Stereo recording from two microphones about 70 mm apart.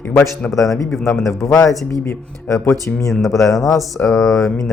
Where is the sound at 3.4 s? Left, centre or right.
Left.